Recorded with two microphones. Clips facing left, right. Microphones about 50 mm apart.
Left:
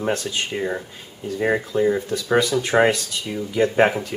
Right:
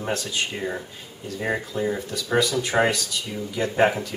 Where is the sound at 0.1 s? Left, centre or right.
Left.